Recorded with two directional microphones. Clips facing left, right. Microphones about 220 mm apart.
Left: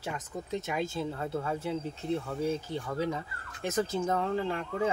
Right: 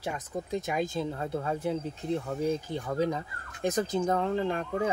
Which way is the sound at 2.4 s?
15° right (ahead or behind).